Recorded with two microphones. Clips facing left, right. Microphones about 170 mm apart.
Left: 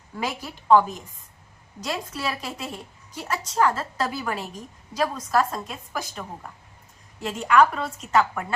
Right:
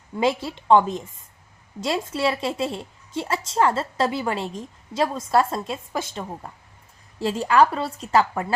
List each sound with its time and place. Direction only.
0.2 s a woman's voice: 25° right (ahead or behind)